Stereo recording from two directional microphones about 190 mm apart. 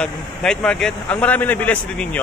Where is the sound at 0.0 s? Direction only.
5° left (ahead or behind).